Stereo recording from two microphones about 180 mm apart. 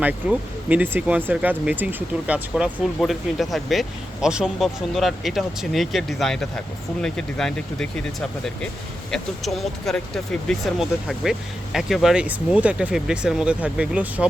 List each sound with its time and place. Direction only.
0.0 s speech: 10° right (ahead or behind)
9.1 s speech: centre (ahead or behind)